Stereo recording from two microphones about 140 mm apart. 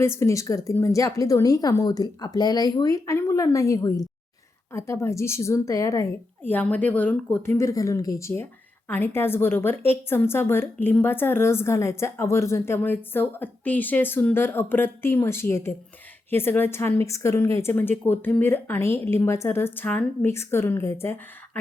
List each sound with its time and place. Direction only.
0.0 s a woman's voice: 20° left (ahead or behind)
6.4 s a woman's voice: 15° left (ahead or behind)